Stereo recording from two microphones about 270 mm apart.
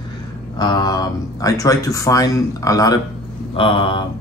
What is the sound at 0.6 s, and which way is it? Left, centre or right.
Speech, centre.